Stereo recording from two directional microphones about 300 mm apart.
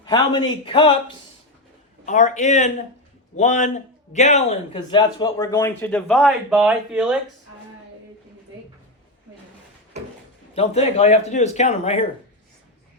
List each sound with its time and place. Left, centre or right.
0.0 s speech: centre
2.0 s speech: left; by 7.2 s centre
10.5 s speech: left